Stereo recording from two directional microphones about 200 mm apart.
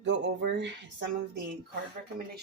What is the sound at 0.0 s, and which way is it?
Speech, 60° right (ahead or behind).